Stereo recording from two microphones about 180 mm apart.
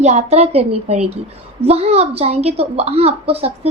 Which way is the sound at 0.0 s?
40° right (ahead or behind).